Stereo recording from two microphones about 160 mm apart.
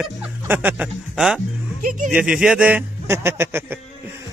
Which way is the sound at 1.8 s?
60° right (ahead or behind).